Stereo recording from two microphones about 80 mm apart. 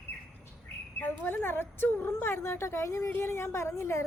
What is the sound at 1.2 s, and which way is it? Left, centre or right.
A woman's voice, left.